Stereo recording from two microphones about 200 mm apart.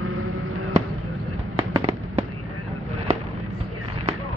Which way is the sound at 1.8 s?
30° right (ahead or behind).